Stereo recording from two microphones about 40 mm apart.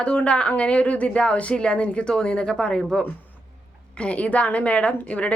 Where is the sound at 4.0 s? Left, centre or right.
Left.